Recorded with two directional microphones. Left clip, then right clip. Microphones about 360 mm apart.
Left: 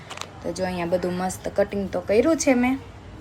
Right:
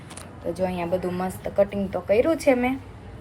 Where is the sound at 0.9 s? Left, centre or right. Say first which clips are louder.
Left 2 dB; centre.